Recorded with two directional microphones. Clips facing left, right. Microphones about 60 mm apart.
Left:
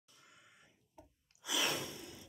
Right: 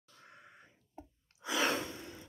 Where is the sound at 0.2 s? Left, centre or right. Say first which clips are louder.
Right 7 dB; right.